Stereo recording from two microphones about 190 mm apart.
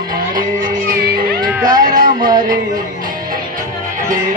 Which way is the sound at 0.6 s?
50° right (ahead or behind).